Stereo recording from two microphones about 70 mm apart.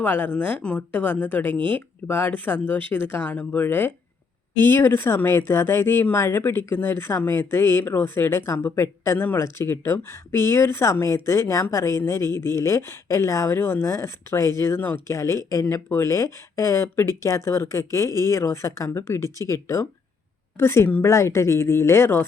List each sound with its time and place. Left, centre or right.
0.0 s speech: left
15.0 s speech: left